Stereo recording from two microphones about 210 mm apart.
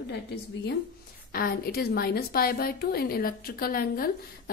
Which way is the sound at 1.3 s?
45° left (ahead or behind).